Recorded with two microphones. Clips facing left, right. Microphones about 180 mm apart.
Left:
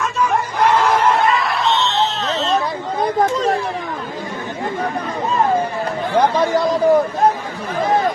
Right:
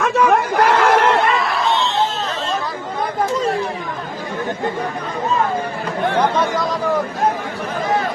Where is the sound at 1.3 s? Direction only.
Centre (ahead or behind).